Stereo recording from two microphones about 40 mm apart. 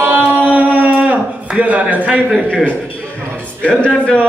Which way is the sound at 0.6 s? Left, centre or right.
Right.